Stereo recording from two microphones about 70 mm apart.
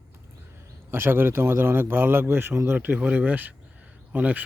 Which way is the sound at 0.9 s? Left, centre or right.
Right.